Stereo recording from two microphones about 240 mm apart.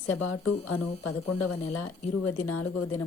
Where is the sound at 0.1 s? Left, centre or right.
Left.